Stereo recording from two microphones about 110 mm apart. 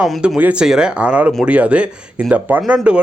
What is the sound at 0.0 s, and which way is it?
Speech, centre (ahead or behind).